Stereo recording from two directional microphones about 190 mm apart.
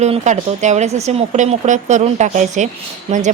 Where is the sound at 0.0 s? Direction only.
35° right (ahead or behind).